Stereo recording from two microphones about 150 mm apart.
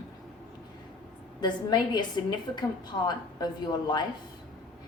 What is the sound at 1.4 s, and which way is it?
A woman's voice, 30° left (ahead or behind).